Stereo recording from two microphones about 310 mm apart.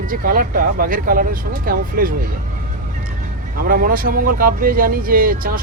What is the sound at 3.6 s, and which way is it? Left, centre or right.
Speech, right.